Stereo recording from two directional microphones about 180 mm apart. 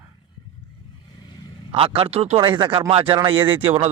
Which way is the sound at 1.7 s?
30° right (ahead or behind).